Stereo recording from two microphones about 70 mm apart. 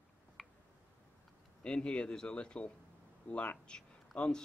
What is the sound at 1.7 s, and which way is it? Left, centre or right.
Speech, centre.